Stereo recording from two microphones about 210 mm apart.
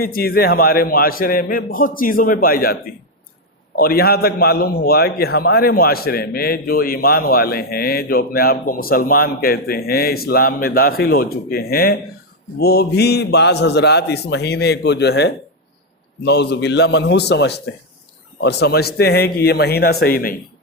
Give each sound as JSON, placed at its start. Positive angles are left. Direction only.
{"t": 0.0, "sound": "a man's voice", "side_deg": 45}